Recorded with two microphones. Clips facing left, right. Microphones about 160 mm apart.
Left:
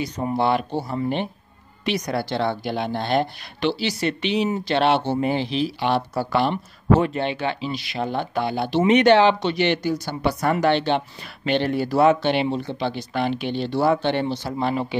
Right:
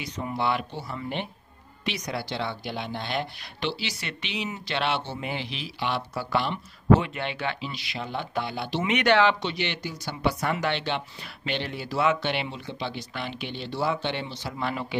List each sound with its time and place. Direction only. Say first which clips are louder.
0.0 s speech: left 7 dB; 35° left (ahead or behind)
7.7 s speech: left 8 dB; 50° left (ahead or behind)
8.9 s speech: left 6 dB; 30° left (ahead or behind)
9.4 s speech: left 9 dB; 50° left (ahead or behind)
14.6 s speech: left 6 dB; 30° left (ahead or behind)